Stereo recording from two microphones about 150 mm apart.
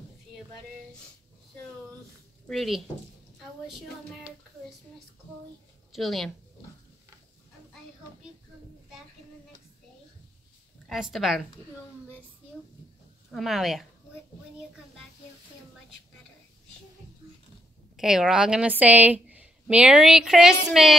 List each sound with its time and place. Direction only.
2.4 s speech: centre (ahead or behind)
5.9 s a woman's voice: centre (ahead or behind)
10.9 s a woman's voice: centre (ahead or behind)
13.3 s a woman's voice: centre (ahead or behind)
17.9 s a woman's voice: 5° right (ahead or behind)